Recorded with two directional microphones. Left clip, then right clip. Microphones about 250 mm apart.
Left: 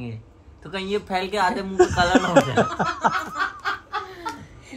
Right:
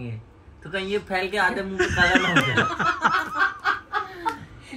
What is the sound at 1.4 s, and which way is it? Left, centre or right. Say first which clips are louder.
Speech: left 3 dB; left.